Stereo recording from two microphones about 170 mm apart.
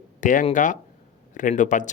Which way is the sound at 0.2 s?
50° left (ahead or behind).